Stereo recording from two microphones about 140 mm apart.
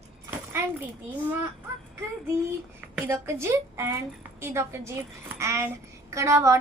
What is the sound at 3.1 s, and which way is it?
A woman's voice, 20° right (ahead or behind).